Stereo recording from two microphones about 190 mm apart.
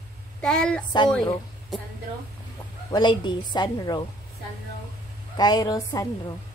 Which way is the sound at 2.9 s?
20° left (ahead or behind).